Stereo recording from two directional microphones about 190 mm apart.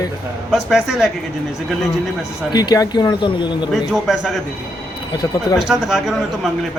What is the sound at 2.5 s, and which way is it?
Speech, 20° left (ahead or behind).